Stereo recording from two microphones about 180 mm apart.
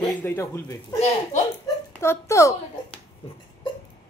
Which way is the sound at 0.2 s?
15° left (ahead or behind).